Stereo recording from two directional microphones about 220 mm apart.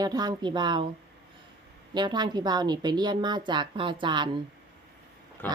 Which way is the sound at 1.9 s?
20° right (ahead or behind).